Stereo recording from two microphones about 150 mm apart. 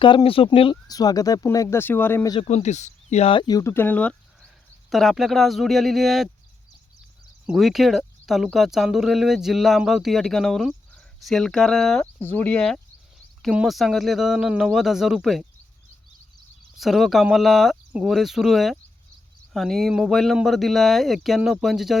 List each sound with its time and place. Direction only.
0.0 s speech: 35° left (ahead or behind)
0.9 s speech: 25° left (ahead or behind)
2.5 s speech: 50° left (ahead or behind); by 4.1 s 10° left (ahead or behind)
4.9 s speech: centre (ahead or behind)
7.4 s speech: centre (ahead or behind)
12.2 s speech: 10° left (ahead or behind)
16.7 s speech: centre (ahead or behind)